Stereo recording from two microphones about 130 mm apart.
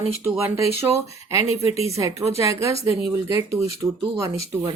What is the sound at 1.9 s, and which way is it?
Speech, 25° right (ahead or behind).